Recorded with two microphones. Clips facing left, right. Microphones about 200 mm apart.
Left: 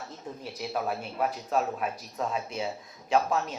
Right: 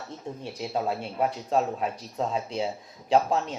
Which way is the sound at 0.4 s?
25° right (ahead or behind).